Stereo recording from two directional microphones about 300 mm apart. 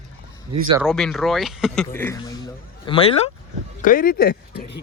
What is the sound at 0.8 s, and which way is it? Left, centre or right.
A man's voice, centre.